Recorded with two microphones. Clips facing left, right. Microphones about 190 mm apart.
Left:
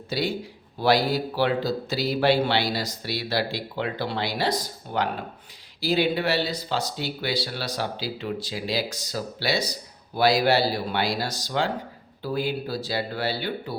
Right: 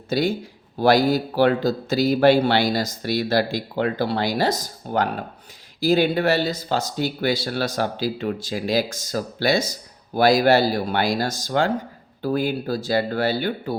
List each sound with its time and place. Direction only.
0.1 s a man's voice: 45° right (ahead or behind)